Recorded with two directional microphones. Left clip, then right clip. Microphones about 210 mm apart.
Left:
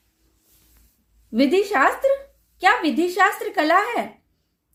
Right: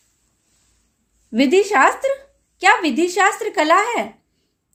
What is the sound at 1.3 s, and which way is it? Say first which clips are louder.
Speech: right 4 dB; 25° right (ahead or behind).